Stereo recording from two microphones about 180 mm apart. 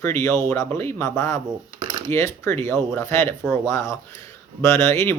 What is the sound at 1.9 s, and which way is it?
Coin, 20° right (ahead or behind).